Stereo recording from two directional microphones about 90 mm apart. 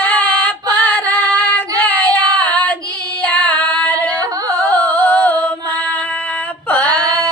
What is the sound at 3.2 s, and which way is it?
Singing, 15° left (ahead or behind).